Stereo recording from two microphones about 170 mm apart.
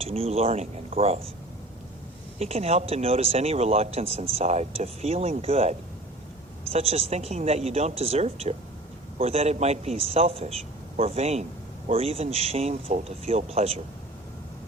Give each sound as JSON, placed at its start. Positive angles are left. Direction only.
{"t": 0.0, "sound": "speech", "side_deg": -35}
{"t": 2.4, "sound": "speech", "side_deg": -35}